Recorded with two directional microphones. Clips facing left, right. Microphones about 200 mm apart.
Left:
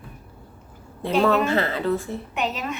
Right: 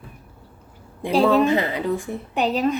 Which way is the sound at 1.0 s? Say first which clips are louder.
Right 3 dB; 15° right (ahead or behind).